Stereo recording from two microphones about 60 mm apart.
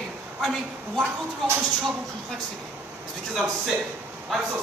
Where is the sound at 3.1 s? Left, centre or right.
Centre.